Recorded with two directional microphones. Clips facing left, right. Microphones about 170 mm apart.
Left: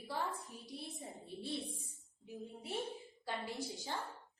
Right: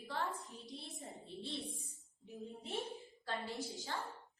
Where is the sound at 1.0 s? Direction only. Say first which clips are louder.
Left 1 dB; 20° left (ahead or behind).